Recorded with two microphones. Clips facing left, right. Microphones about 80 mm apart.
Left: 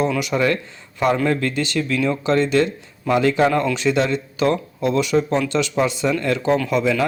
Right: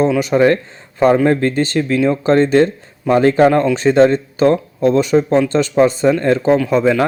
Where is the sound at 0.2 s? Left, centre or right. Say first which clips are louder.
Right 7 dB; right.